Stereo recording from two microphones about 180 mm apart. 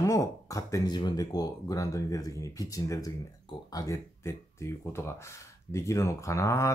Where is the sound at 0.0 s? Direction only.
15° left (ahead or behind).